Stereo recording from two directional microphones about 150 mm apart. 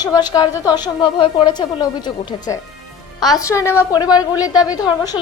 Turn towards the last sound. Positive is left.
turn(degrees=25)  # may be behind; listen again after turning